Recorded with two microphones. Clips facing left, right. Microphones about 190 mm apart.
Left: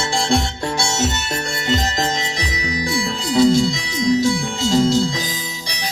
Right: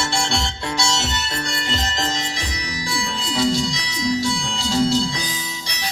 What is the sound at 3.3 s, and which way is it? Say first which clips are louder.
Music: left 7 dB; 50° left (ahead or behind).